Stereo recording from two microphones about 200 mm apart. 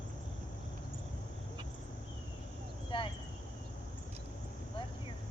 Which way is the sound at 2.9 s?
25° left (ahead or behind).